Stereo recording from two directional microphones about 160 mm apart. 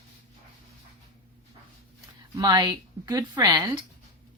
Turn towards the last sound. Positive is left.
turn(degrees=-25)  # may be behind; listen again after turning